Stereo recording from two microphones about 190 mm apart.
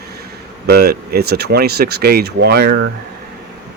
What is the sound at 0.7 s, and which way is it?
Speech, 55° right (ahead or behind).